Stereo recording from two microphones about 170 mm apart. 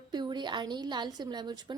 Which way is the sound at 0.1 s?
25° right (ahead or behind).